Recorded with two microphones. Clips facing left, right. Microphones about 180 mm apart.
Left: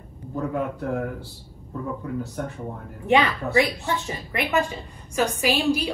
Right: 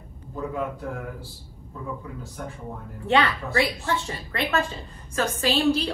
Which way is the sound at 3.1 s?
15° left (ahead or behind).